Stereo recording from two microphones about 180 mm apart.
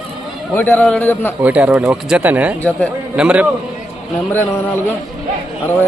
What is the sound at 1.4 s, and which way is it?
Speech, 10° right (ahead or behind).